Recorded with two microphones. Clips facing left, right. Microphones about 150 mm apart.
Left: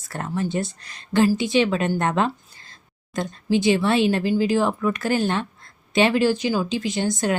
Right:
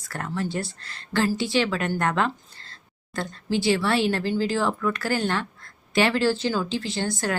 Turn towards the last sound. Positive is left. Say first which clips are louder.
# left 4 dB
turn(degrees=20)  # may be behind; listen again after turning